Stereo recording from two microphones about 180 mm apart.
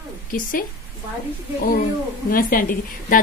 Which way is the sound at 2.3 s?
50° left (ahead or behind).